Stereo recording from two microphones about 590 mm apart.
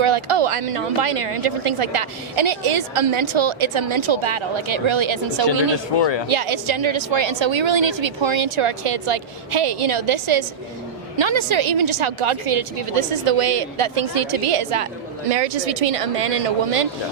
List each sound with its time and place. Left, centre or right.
0.0 s speech: right
6.2 s a woman's voice: right
15.3 s speech: right